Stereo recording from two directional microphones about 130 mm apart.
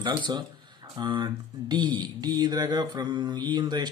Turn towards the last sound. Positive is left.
turn(degrees=-35)  # may be behind; listen again after turning